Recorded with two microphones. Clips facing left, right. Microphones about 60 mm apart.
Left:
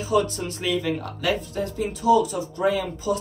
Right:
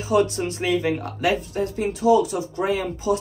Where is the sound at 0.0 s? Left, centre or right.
Right.